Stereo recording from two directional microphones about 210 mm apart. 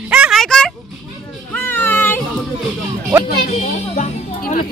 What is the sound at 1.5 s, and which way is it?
Children playing, 10° left (ahead or behind).